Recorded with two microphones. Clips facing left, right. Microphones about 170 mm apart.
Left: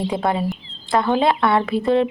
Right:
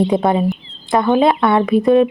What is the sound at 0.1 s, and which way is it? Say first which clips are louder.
Speech: right 6 dB; 20° right (ahead or behind).